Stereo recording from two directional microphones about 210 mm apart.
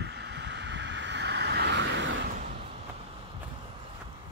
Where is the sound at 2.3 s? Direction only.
35° right (ahead or behind).